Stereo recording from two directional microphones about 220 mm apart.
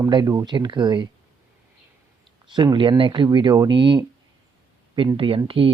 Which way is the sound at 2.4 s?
20° right (ahead or behind).